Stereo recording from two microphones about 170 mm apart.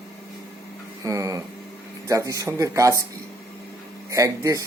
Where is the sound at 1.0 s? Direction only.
20° right (ahead or behind).